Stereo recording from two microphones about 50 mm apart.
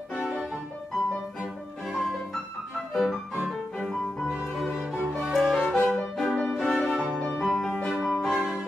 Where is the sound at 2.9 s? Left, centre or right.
Centre.